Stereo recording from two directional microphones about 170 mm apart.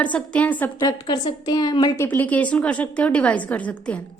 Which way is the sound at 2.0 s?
10° left (ahead or behind).